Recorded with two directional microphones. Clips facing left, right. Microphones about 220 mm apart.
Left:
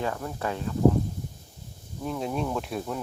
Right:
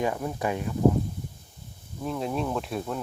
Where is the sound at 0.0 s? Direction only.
15° right (ahead or behind).